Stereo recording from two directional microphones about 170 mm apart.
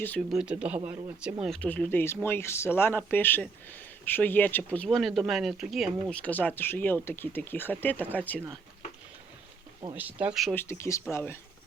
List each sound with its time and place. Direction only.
0.0 s speech: 5° left (ahead or behind)
1.5 s speech: 10° left (ahead or behind)
9.9 s speech: 10° right (ahead or behind)
10.5 s speech: 15° left (ahead or behind)